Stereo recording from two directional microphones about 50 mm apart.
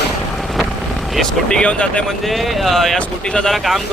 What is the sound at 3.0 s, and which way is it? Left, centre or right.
Speech, centre.